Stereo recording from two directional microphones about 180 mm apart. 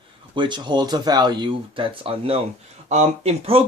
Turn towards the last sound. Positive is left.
turn(degrees=-35)  # may be behind; listen again after turning